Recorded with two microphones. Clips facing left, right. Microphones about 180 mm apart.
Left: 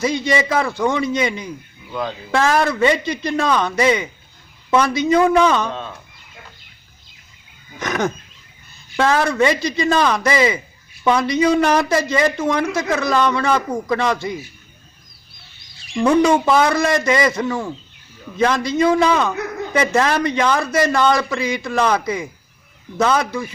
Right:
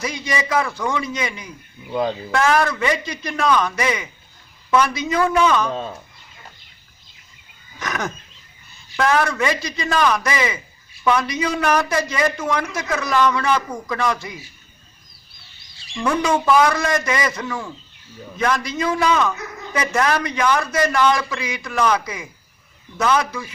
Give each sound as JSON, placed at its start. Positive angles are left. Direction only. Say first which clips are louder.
{"t": 0.0, "sound": "a woman's voice", "louder": "left 6 dB", "side_deg": 25}
{"t": 1.9, "sound": "speech", "louder": "right 4 dB", "side_deg": -30}
{"t": 2.3, "sound": "a woman's voice", "louder": "left 2 dB", "side_deg": 30}
{"t": 7.8, "sound": "a woman's voice", "louder": "left 6 dB", "side_deg": 25}
{"t": 16.0, "sound": "a woman's voice", "louder": "left 4 dB", "side_deg": 25}